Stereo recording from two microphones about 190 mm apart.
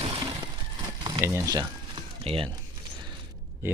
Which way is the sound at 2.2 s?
30° right (ahead or behind).